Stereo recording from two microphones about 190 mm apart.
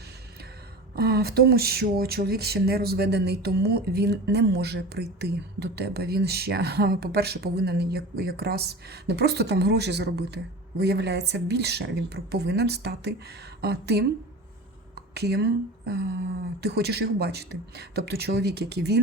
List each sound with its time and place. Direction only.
0.9 s speech: 55° right (ahead or behind)